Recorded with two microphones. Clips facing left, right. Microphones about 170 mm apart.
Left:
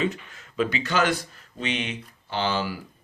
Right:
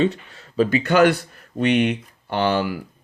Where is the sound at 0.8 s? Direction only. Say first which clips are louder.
Right 10 dB; 60° right (ahead or behind).